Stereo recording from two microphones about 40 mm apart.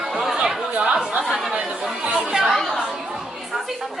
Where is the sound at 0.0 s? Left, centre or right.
Centre.